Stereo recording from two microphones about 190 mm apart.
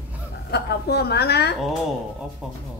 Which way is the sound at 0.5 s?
60° left (ahead or behind).